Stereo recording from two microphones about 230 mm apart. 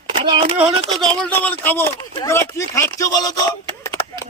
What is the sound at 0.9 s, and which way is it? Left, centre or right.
Speech, centre.